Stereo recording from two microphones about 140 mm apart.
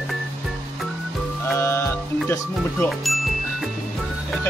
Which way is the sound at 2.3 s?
15° left (ahead or behind).